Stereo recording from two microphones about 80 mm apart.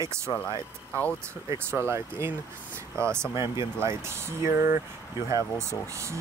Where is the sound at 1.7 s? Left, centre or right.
Right.